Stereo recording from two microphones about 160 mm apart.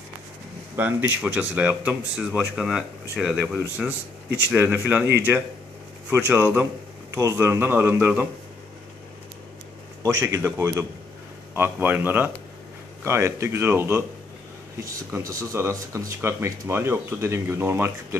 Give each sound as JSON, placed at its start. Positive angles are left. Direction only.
{"t": 0.7, "sound": "speech", "side_deg": -10}
{"t": 6.0, "sound": "speech", "side_deg": -10}
{"t": 10.0, "sound": "speech", "side_deg": -20}